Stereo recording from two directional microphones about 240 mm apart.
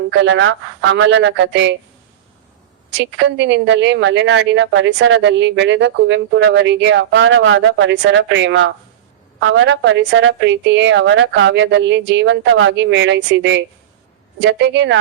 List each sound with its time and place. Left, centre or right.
0.2 s a woman's voice: right
3.2 s a woman's voice: right